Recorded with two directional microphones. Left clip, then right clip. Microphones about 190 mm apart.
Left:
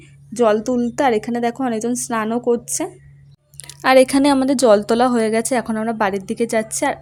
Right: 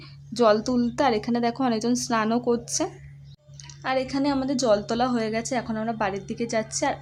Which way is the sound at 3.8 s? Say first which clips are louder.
Left 13 dB; 50° left (ahead or behind).